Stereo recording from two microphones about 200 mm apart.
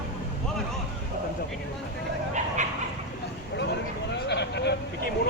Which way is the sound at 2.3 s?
35° right (ahead or behind).